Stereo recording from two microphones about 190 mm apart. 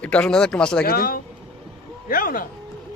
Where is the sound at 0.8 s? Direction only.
50° left (ahead or behind).